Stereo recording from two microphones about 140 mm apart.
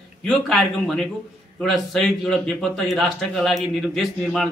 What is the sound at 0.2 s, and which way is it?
A man's voice, 5° left (ahead or behind).